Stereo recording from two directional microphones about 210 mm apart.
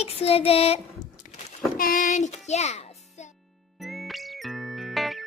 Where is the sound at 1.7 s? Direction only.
40° left (ahead or behind).